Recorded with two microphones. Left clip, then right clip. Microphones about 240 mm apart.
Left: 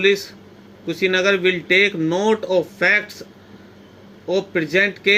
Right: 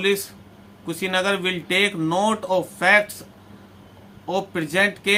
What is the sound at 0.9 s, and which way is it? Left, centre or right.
Speech, centre.